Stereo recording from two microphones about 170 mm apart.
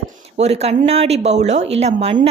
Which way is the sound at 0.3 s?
40° right (ahead or behind).